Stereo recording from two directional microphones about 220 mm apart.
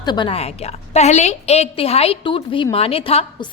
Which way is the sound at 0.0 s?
20° left (ahead or behind).